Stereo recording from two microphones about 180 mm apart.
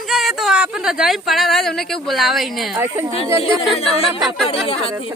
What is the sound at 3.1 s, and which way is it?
Speech, 30° left (ahead or behind).